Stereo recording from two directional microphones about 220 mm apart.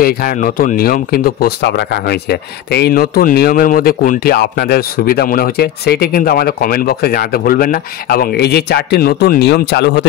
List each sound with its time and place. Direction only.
0.0 s speech: 40° left (ahead or behind)